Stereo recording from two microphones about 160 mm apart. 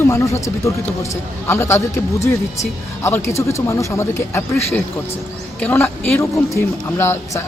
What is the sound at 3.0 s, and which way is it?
Speech, 15° left (ahead or behind).